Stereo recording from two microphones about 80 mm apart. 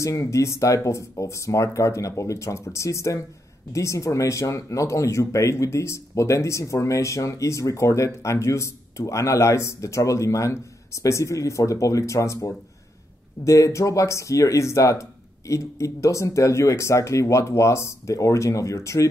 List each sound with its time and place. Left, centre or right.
0.0 s speech: left